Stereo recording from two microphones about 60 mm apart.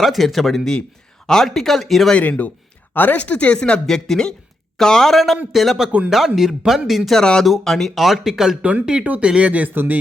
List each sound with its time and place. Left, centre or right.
0.0 s speech: centre
2.9 s speech: left
3.8 s a man's voice: centre
7.2 s speech: centre
8.6 s speech: centre